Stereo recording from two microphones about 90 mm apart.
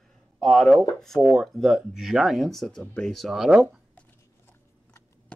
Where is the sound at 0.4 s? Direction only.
5° left (ahead or behind).